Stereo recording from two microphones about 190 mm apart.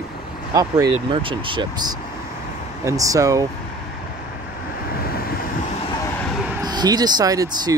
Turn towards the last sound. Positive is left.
turn(degrees=-20)  # may be behind; listen again after turning